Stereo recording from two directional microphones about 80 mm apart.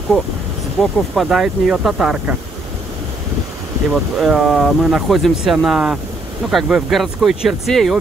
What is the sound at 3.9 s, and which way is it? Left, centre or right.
Speech, centre.